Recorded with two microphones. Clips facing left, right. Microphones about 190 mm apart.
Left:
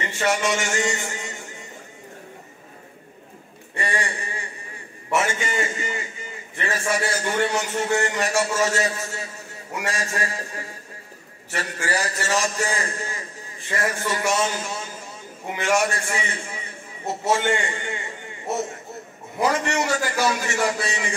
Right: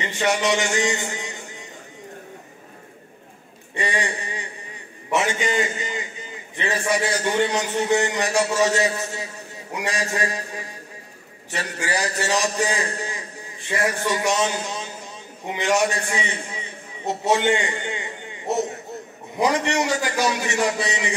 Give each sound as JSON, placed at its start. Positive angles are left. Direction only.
{"t": 0.0, "sound": "a man's voice", "side_deg": -20}
{"t": 3.7, "sound": "a man's voice", "side_deg": -20}